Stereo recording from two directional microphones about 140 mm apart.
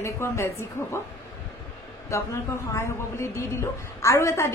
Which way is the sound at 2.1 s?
20° left (ahead or behind).